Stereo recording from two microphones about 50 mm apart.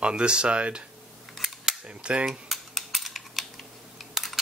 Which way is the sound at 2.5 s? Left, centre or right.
Centre.